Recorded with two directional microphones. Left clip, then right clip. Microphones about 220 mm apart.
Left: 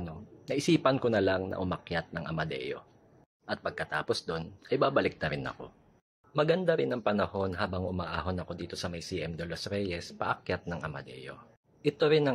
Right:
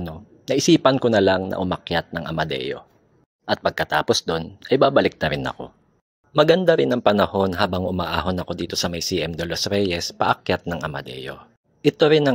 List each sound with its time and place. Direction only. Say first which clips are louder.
0.0 s speech: right 10 dB; 35° right (ahead or behind)